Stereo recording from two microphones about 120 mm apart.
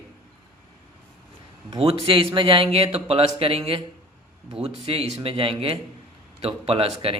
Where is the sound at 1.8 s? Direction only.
50° right (ahead or behind).